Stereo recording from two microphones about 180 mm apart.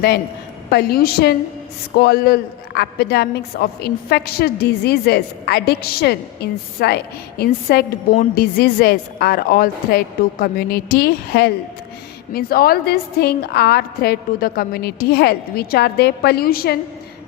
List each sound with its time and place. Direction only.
0.7 s a woman's voice: 60° left (ahead or behind)